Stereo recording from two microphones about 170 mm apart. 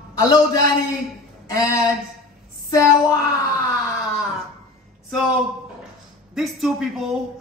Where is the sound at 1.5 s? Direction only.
20° left (ahead or behind).